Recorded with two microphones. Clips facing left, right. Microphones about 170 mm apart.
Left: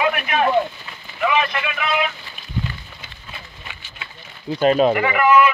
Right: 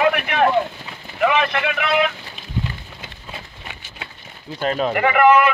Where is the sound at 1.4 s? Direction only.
65° right (ahead or behind).